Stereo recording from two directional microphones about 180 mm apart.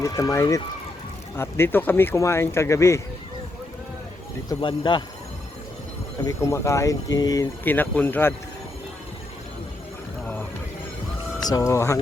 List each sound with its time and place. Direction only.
0.0 s speech: 15° left (ahead or behind)
4.4 s speech: 25° left (ahead or behind)
6.2 s speech: 15° left (ahead or behind)
11.4 s speech: 20° left (ahead or behind)